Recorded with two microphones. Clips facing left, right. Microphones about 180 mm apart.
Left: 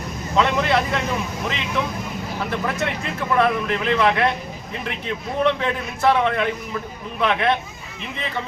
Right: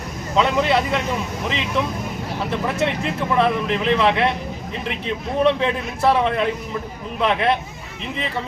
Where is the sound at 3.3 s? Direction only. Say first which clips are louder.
Even; 25° right (ahead or behind).